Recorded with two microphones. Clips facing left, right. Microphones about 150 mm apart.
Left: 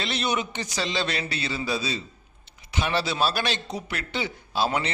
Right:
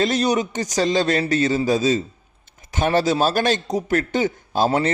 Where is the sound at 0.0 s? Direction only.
40° right (ahead or behind).